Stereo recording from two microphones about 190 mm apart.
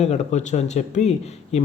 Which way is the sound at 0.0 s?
35° left (ahead or behind).